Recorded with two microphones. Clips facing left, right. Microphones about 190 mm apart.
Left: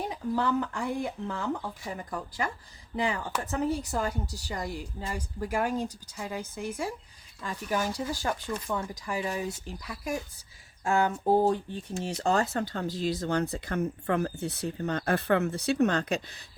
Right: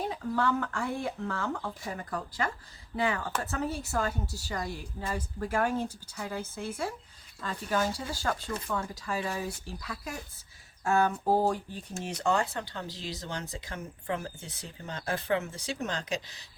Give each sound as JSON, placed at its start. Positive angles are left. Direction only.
{"t": 0.1, "sound": "speech", "side_deg": 15}
{"t": 11.4, "sound": "speech", "side_deg": 25}